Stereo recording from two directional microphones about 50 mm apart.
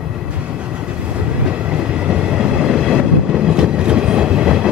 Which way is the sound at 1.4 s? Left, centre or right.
Right.